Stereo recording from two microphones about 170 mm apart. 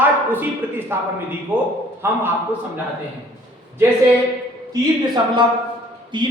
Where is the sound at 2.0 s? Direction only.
15° right (ahead or behind).